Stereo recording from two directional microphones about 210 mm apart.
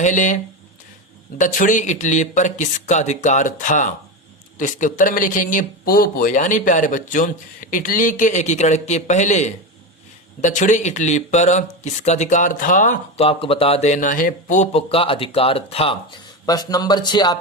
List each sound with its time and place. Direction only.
0.0 s speech: 35° left (ahead or behind)
1.4 s speech: 40° left (ahead or behind)
16.5 s speech: 15° left (ahead or behind)